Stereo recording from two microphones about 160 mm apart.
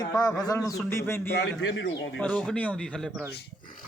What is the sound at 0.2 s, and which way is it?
A man's voice, 25° left (ahead or behind).